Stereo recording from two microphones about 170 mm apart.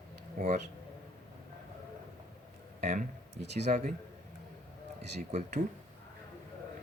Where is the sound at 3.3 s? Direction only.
85° right.